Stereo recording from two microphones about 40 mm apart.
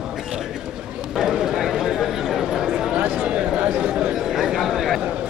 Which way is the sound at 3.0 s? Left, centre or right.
Right.